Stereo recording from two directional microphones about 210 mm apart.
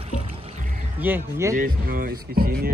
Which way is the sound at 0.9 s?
10° right (ahead or behind).